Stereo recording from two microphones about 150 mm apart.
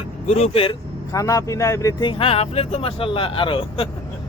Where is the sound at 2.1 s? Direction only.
40° left (ahead or behind).